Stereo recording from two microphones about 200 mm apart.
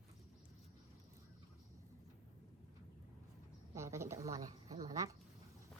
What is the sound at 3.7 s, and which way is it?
A woman's voice, 15° right (ahead or behind).